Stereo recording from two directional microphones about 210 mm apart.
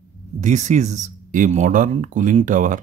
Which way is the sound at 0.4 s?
35° right (ahead or behind).